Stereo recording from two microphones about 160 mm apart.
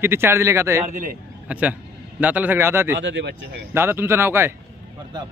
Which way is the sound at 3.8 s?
15° right (ahead or behind).